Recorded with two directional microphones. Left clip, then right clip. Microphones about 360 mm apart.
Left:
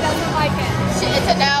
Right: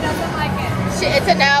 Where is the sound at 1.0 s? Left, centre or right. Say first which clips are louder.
Right 3 dB; centre.